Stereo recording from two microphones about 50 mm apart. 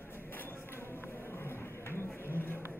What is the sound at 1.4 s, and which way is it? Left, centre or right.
Vehicle, left.